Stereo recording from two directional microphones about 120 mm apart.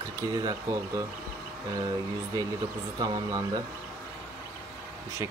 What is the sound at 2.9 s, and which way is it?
Speech, 35° right (ahead or behind).